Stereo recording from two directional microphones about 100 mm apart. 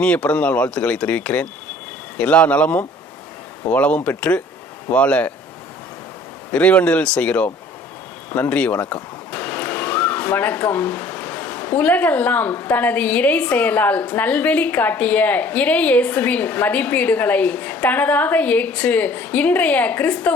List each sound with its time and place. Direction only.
0.0 s speech: 10° left (ahead or behind)
6.5 s speech: 15° left (ahead or behind)